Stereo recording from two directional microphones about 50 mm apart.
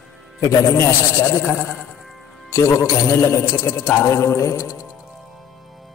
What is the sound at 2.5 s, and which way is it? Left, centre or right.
A man's voice, left.